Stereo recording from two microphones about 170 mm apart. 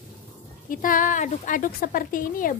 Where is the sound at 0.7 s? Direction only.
55° left (ahead or behind).